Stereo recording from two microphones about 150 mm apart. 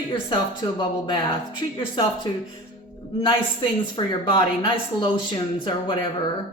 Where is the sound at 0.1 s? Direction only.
30° left (ahead or behind).